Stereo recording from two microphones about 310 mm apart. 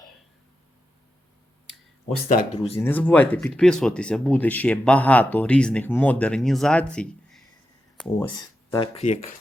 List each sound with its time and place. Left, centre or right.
2.0 s speech: left
2.7 s speech: centre
8.3 s speech: centre